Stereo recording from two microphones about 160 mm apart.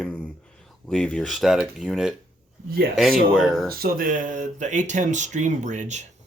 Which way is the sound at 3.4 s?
Centre (ahead or behind).